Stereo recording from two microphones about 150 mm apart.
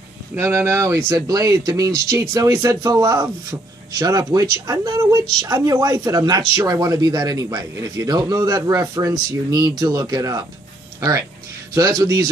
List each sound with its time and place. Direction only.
0.3 s a man's voice: 15° right (ahead or behind)